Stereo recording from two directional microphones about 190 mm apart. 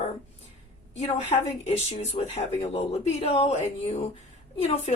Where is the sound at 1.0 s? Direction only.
35° left (ahead or behind).